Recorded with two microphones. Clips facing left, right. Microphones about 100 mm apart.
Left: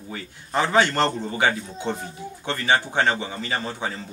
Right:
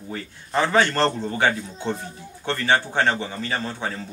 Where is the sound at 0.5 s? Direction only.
15° left (ahead or behind).